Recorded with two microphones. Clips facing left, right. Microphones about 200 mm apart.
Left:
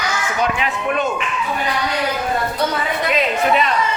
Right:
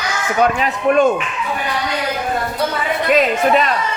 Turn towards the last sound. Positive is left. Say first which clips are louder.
# right 3 dB
turn(degrees=-45)  # may be behind; listen again after turning